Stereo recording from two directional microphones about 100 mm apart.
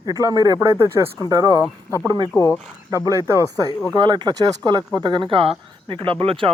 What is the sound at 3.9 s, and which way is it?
Speech, 50° right (ahead or behind).